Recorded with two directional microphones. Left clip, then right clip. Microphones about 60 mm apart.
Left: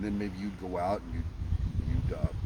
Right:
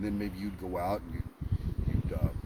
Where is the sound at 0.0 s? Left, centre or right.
Left.